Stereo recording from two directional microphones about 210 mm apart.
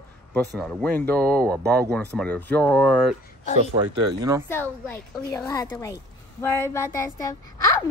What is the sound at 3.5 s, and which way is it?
Speech, 25° right (ahead or behind).